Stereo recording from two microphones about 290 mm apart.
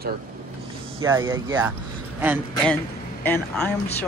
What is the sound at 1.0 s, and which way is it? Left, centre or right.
Speech, centre.